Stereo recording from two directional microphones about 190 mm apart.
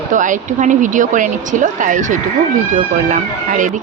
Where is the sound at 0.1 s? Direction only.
40° right (ahead or behind).